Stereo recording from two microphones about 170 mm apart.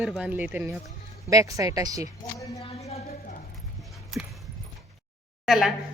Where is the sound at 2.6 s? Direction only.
40° left (ahead or behind).